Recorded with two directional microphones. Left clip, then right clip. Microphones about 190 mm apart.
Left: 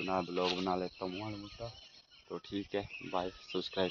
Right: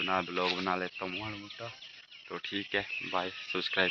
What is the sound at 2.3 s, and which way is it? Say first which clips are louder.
Speech: right 5 dB; 10° left (ahead or behind).